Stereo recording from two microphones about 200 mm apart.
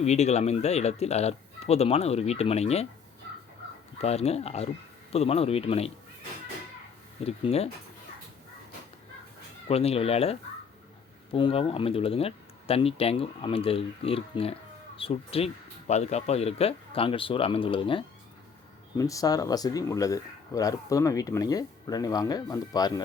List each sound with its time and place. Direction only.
0.0 s speech: 35° left (ahead or behind)
3.9 s speech: 30° left (ahead or behind)
7.3 s speech: 30° left (ahead or behind)
9.6 s speech: 30° left (ahead or behind)